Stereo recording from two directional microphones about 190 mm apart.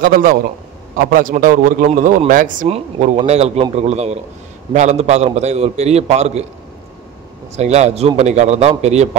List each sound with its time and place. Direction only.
0.0 s a man's voice: 45° right (ahead or behind)
2.7 s a man's voice: 35° right (ahead or behind)
7.5 s a man's voice: 35° right (ahead or behind)